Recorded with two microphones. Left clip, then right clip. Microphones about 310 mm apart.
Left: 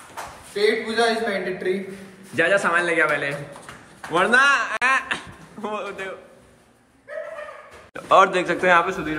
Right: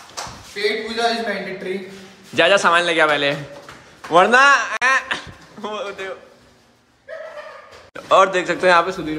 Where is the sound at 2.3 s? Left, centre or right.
Centre.